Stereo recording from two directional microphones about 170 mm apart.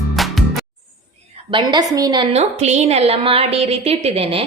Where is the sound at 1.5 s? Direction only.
25° right (ahead or behind).